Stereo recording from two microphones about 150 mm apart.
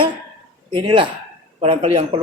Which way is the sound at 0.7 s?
35° right (ahead or behind).